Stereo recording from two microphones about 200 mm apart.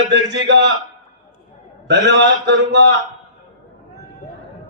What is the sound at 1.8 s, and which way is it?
Mantra, 60° right (ahead or behind).